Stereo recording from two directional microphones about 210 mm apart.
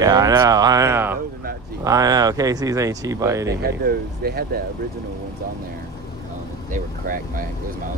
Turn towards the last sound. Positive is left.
turn(degrees=-40)  # may be behind; listen again after turning